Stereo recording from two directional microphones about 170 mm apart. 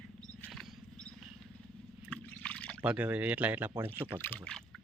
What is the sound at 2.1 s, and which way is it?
Water, 5° left (ahead or behind).